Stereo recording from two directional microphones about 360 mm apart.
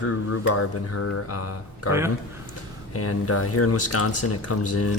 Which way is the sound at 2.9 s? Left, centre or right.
Left.